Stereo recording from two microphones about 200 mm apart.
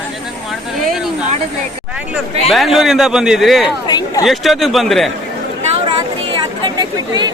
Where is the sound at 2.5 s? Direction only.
Centre (ahead or behind).